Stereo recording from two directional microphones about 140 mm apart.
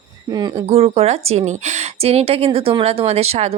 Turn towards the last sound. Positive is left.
turn(degrees=-45)  # may be behind; listen again after turning